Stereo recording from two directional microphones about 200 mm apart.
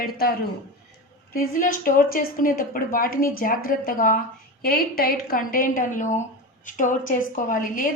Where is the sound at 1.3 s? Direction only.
45° left (ahead or behind).